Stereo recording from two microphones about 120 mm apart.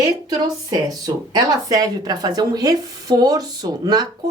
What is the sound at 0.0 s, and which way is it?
Speech, 35° right (ahead or behind).